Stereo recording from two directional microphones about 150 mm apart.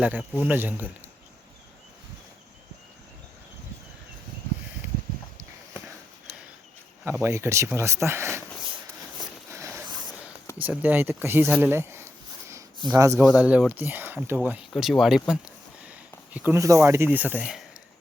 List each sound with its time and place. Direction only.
0.0 s speech: 10° right (ahead or behind)
7.0 s speech: 15° right (ahead or behind)
9.5 s a sound: 20° right (ahead or behind)
10.6 s speech: 10° right (ahead or behind)
13.1 s speech: 5° right (ahead or behind)